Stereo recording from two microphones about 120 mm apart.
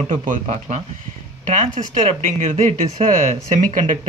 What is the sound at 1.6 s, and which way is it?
Speech, 55° right (ahead or behind).